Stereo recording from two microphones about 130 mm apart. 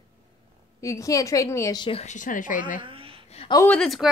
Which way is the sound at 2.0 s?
75° left (ahead or behind).